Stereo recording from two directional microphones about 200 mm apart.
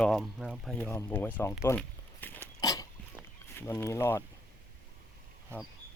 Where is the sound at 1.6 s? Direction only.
10° left (ahead or behind).